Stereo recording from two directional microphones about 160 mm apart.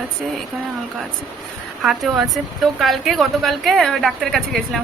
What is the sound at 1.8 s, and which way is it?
Speech, centre (ahead or behind).